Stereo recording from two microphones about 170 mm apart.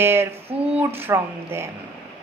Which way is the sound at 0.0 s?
15° right (ahead or behind).